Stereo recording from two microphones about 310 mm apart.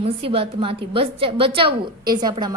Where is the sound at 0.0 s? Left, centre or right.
Centre.